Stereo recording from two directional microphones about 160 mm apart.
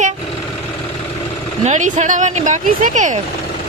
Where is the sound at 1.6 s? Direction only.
45° right (ahead or behind).